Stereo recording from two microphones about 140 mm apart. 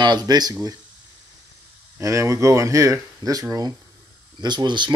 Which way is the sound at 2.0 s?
20° right (ahead or behind).